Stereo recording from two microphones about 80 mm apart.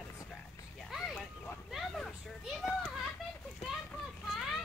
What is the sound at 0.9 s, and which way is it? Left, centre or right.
Speech, centre.